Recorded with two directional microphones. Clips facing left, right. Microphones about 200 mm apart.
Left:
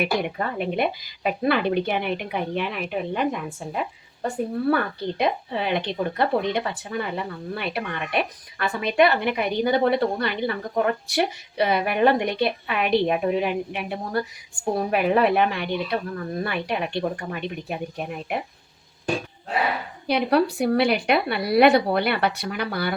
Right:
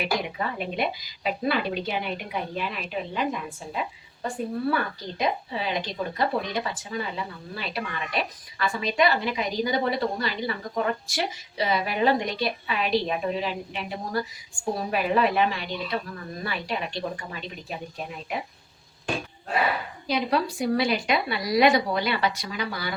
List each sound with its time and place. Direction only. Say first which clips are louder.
0.0 s a woman's voice: left 4 dB; 55° left (ahead or behind)
20.1 s speech: left 5 dB; 60° left (ahead or behind)